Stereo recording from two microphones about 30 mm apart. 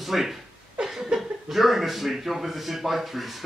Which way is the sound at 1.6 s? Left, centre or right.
Centre.